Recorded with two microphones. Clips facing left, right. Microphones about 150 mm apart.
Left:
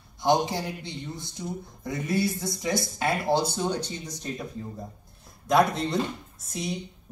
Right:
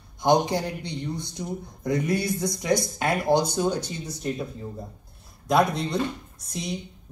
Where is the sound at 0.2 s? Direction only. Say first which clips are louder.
Right 3 dB; 20° right (ahead or behind).